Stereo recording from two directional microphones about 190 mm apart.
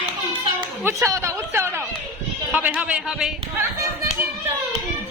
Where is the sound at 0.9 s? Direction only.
15° right (ahead or behind).